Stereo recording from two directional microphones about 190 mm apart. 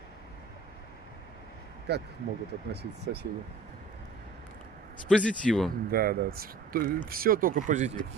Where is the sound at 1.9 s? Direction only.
60° right (ahead or behind).